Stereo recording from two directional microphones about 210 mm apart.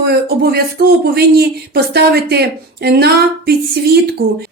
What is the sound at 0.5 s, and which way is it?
Speech, 50° right (ahead or behind).